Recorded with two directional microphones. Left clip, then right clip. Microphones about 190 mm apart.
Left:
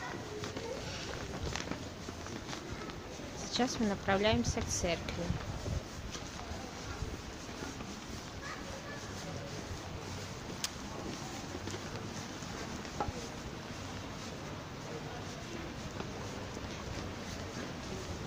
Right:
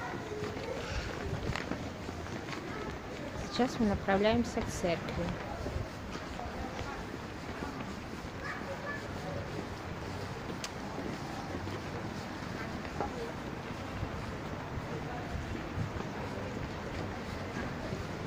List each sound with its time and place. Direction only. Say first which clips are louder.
3.5 s speech: right 2 dB; 5° left (ahead or behind)